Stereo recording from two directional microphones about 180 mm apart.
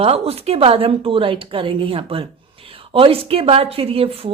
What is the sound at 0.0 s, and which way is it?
A woman's voice, 35° right (ahead or behind).